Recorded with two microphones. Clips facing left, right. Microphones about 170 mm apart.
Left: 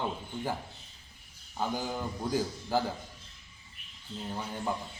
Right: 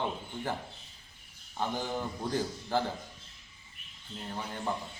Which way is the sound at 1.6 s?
5° left (ahead or behind).